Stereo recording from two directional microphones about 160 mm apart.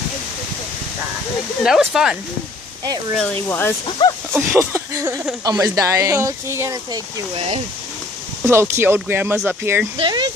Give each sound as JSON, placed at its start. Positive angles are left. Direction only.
{"t": 1.6, "sound": "speech", "side_deg": 0}
{"t": 3.4, "sound": "speech", "side_deg": 15}
{"t": 4.0, "sound": "speech", "side_deg": 30}
{"t": 4.5, "sound": "speech", "side_deg": -15}
{"t": 8.5, "sound": "speech", "side_deg": -15}
{"t": 9.9, "sound": "speech", "side_deg": -30}